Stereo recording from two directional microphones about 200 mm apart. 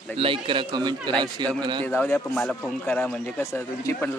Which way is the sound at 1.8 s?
10° left (ahead or behind).